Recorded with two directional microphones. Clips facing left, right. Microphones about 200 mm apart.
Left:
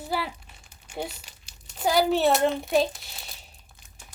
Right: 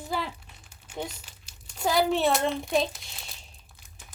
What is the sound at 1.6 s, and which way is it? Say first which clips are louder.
Speech: left 2 dB; centre (ahead or behind).